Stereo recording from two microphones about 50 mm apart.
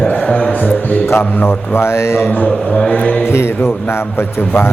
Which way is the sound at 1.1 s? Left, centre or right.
Left.